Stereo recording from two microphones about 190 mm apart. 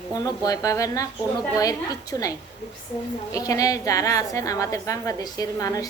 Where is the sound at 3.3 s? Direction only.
20° left (ahead or behind).